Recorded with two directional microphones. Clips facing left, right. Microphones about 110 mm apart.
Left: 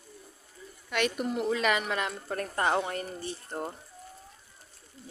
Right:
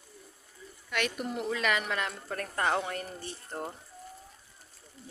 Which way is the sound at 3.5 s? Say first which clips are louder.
Left 1 dB; 10° left (ahead or behind).